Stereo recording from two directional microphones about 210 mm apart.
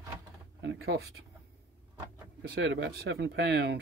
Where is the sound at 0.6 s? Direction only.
55° right (ahead or behind).